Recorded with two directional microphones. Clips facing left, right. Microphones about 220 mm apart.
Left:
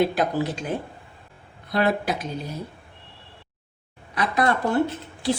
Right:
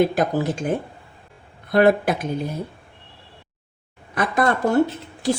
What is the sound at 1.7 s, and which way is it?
Speech, 55° right (ahead or behind).